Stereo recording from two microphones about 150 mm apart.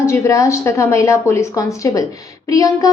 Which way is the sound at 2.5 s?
25° left (ahead or behind).